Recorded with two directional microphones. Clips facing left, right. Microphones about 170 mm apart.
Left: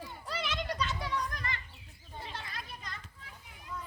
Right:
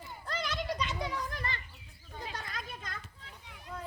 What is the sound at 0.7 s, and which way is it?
Children playing, 15° right (ahead or behind).